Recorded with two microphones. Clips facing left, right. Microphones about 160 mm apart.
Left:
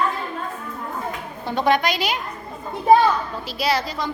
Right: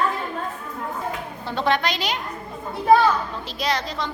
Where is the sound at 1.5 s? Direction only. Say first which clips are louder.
Left 3 dB; 15° left (ahead or behind).